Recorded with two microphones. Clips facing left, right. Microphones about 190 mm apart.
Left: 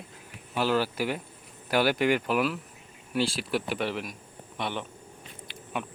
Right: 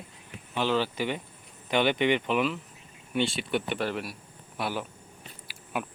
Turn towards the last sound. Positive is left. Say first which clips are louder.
# right 1 dB
turn(degrees=-5)  # may be behind; listen again after turning